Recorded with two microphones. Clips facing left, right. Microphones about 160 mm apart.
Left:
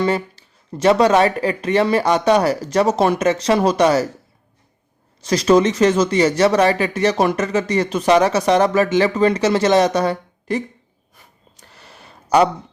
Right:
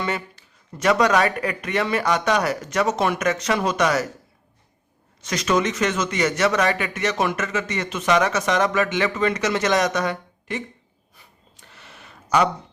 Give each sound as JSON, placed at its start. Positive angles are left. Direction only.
{"t": 0.0, "sound": "speech", "side_deg": 30}
{"t": 5.2, "sound": "speech", "side_deg": 35}
{"t": 11.1, "sound": "a sound", "side_deg": 45}